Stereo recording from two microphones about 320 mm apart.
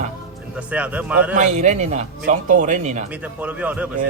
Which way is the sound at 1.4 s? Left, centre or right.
Right.